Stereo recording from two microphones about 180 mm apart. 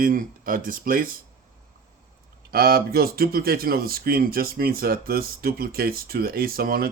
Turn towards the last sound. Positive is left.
turn(degrees=-55)  # may be behind; listen again after turning